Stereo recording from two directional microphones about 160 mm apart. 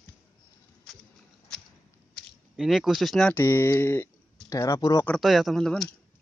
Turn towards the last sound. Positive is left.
turn(degrees=5)  # may be behind; listen again after turning